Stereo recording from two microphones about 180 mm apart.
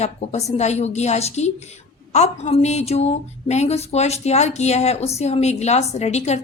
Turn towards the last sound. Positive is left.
turn(degrees=40)  # may be behind; listen again after turning